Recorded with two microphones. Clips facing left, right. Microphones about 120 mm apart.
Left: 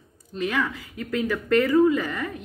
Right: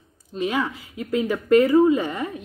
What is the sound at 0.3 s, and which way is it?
Speech, 25° right (ahead or behind).